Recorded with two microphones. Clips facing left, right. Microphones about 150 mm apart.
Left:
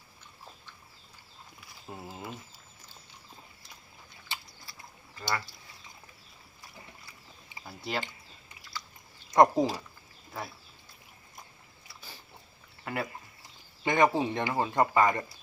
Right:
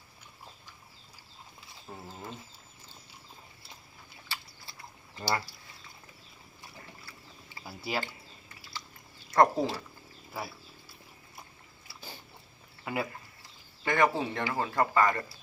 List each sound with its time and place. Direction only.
1.9 s speech: 15° left (ahead or behind)
4.7 s typing: 25° right (ahead or behind)
5.1 s speech: 25° right (ahead or behind)
7.6 s speech: 5° right (ahead or behind)
9.3 s speech: 15° left (ahead or behind)
10.3 s wild animals: 5° right (ahead or behind)
12.8 s a sound: 5° right (ahead or behind)
13.8 s speech: 20° left (ahead or behind)